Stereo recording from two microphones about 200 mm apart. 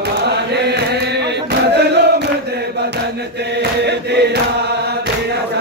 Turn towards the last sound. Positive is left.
turn(degrees=-55)  # may be behind; listen again after turning